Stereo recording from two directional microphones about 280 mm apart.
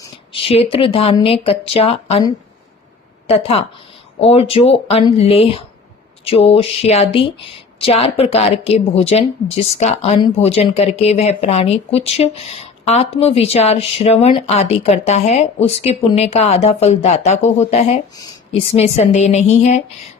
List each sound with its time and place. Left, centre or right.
0.0 s speech: centre